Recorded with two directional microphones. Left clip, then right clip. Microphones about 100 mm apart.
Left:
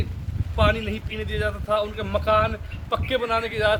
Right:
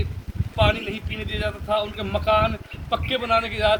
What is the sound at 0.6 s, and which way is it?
A man's voice, 40° left (ahead or behind).